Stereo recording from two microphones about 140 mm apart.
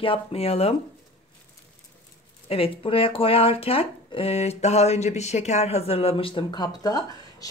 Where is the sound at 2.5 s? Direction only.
40° left (ahead or behind).